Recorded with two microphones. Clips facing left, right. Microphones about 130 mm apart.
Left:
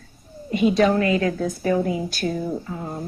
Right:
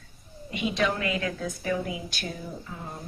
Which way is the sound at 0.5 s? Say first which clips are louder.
Left 10 dB; 40° left (ahead or behind).